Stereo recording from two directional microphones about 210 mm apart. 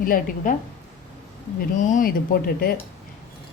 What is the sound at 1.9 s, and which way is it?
Speech, 45° left (ahead or behind).